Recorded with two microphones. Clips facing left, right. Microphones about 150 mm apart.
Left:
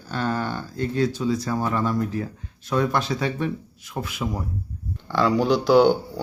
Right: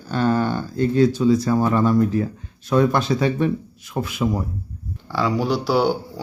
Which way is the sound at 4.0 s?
90° right.